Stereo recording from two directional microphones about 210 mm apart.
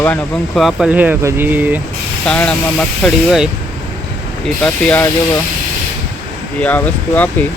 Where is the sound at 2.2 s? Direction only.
5° left (ahead or behind).